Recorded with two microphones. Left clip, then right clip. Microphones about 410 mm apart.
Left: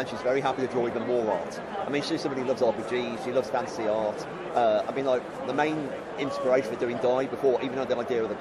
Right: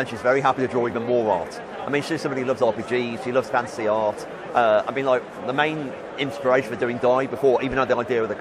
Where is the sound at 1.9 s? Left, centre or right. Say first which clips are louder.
Right 6 dB; right.